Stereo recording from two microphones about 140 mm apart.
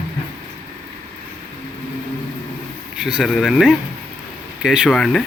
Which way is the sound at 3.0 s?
5° right (ahead or behind).